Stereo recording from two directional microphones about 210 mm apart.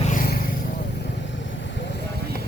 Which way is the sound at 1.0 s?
55° left (ahead or behind).